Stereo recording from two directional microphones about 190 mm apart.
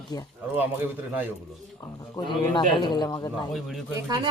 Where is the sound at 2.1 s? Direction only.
25° left (ahead or behind).